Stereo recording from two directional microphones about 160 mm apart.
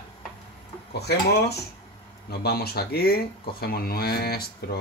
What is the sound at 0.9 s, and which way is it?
Speech, 90° left.